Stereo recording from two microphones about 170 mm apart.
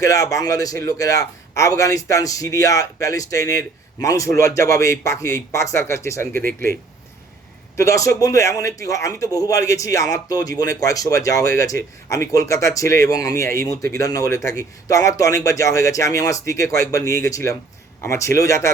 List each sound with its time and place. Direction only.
0.0 s a man's voice: 20° left (ahead or behind)
7.8 s a man's voice: 20° left (ahead or behind)